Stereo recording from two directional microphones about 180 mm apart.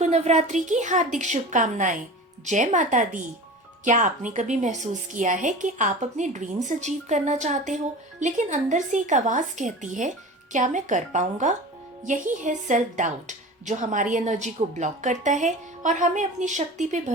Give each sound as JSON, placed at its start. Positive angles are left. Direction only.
{"t": 0.0, "sound": "a woman's voice", "side_deg": -40}